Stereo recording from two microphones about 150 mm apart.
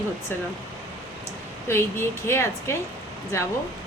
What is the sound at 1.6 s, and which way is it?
Speech, 15° left (ahead or behind).